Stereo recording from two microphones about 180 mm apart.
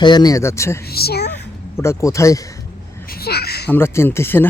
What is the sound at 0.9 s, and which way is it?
Speech, 60° left (ahead or behind).